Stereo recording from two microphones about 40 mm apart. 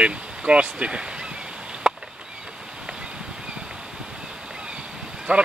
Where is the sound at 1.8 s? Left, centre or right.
Centre.